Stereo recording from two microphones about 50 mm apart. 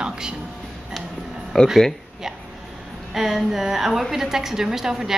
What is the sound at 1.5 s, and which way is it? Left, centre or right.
Speech, centre.